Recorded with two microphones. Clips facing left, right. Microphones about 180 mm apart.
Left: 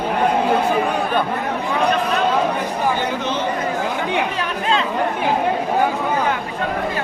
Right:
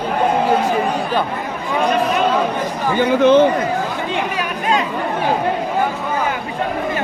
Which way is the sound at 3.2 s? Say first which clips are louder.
Right 13 dB; 55° right (ahead or behind).